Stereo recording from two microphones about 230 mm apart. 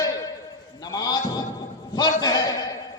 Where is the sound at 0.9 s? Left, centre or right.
Centre.